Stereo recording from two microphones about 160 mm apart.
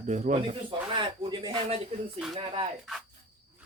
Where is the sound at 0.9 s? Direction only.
30° right (ahead or behind).